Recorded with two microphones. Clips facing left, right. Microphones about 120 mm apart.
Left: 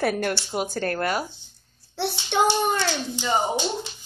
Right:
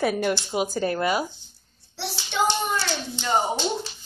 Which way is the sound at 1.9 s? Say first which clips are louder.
Left 4 dB; 60° left (ahead or behind).